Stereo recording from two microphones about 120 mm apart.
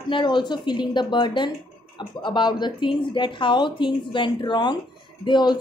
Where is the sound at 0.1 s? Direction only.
40° left (ahead or behind).